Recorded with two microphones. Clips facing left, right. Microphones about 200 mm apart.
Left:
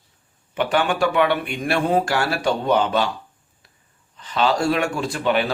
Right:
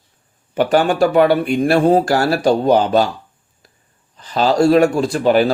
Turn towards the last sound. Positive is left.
turn(degrees=-40)  # may be behind; listen again after turning